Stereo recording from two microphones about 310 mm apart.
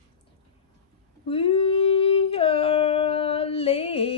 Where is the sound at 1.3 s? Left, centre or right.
Centre.